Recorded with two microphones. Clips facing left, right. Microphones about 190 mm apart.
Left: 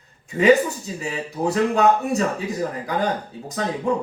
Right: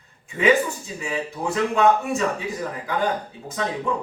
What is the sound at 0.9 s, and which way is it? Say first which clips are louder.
Speech: even; 40° left (ahead or behind).